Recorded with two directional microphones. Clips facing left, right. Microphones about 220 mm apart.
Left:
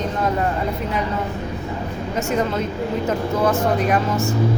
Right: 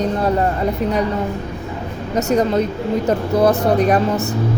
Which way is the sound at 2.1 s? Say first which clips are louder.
Right 6 dB; 35° right (ahead or behind).